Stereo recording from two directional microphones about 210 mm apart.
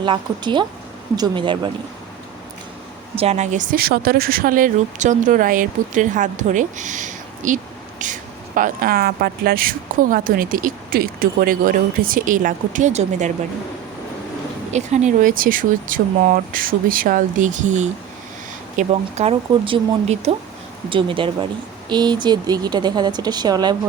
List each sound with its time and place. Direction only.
0.0 s speech: 20° right (ahead or behind)
3.2 s speech: 30° right (ahead or behind)
14.7 s speech: 35° right (ahead or behind)